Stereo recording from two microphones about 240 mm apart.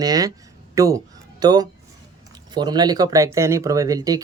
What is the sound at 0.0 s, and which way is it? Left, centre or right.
Speech, centre.